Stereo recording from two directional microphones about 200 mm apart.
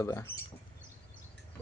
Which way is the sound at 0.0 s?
15° left (ahead or behind).